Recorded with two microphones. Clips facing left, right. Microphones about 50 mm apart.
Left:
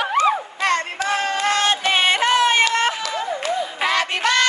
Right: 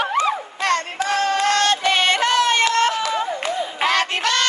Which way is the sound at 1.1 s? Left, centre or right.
Left.